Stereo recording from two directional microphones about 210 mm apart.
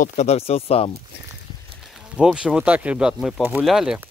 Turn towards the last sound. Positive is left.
turn(degrees=0)  # may be behind; listen again after turning